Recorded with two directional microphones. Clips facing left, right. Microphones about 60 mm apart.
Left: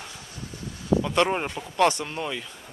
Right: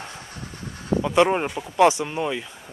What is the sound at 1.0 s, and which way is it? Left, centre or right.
Speech, centre.